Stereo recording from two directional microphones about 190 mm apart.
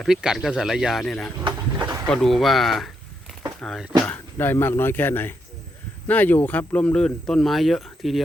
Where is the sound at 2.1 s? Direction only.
Centre (ahead or behind).